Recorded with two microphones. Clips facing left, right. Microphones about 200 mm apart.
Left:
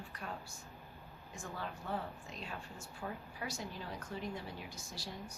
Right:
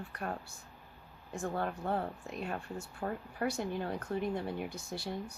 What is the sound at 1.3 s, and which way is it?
Speech, 60° right (ahead or behind).